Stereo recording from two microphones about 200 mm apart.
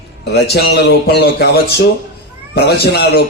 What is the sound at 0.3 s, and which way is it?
A man's voice, 55° left (ahead or behind).